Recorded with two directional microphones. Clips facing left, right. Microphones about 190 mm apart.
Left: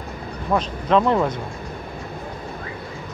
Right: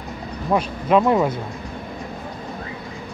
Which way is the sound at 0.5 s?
10° right (ahead or behind).